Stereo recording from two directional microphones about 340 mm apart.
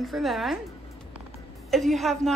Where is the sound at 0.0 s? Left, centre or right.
Centre.